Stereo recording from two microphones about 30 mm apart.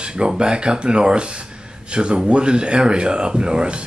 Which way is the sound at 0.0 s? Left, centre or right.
Right.